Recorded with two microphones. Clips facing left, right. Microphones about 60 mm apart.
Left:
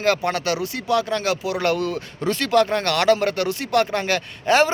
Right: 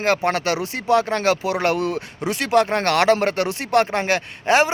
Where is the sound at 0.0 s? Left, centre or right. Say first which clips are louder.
Right 1 dB; right.